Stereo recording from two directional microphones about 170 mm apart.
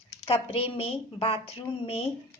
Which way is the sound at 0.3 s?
35° left (ahead or behind).